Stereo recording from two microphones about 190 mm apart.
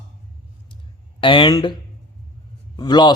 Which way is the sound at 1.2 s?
25° left (ahead or behind).